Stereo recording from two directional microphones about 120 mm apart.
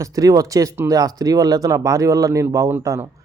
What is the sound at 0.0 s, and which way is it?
Speech, 30° right (ahead or behind).